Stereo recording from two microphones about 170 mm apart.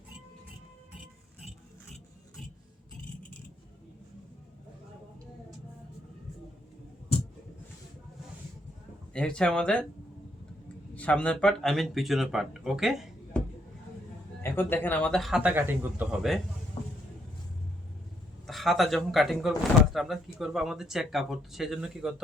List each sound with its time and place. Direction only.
9.1 s speech: 5° left (ahead or behind)
10.9 s speech: 5° left (ahead or behind)
14.4 s speech: 10° left (ahead or behind); by 16.0 s 10° right (ahead or behind)
16.8 s a sound: 35° left (ahead or behind)
18.4 s speech: centre (ahead or behind)